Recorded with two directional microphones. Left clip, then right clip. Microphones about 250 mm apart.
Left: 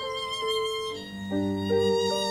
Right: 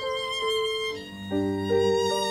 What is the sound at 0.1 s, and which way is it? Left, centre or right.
Music, right.